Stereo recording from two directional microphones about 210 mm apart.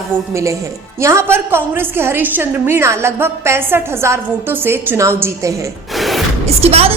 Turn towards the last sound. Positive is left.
turn(degrees=-30)  # may be behind; listen again after turning